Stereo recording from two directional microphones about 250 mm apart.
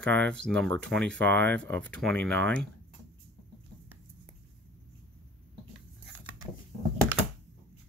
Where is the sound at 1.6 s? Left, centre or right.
Centre.